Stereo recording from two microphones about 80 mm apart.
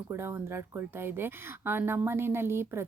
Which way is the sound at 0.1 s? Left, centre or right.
Right.